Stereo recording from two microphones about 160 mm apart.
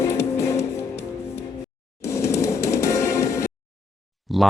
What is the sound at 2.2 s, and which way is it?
Music, 20° left (ahead or behind).